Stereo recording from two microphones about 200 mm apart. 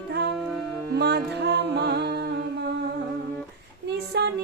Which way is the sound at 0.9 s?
55° right (ahead or behind).